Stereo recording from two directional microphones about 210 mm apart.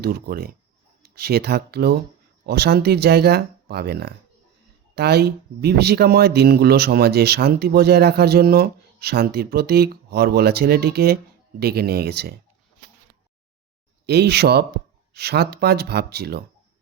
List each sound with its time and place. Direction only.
0.0 s speech: 50° right (ahead or behind)
14.1 s speech: 50° right (ahead or behind)